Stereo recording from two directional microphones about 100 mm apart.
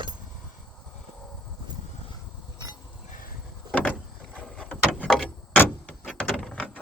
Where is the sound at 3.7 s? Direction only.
15° left (ahead or behind).